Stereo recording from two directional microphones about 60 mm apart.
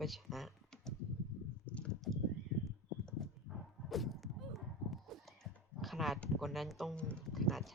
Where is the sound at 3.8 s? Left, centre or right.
Centre.